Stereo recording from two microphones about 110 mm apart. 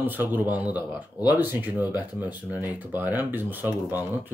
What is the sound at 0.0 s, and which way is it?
Speech, 15° right (ahead or behind).